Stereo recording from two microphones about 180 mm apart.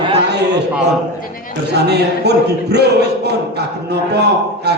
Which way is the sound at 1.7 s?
65° right (ahead or behind).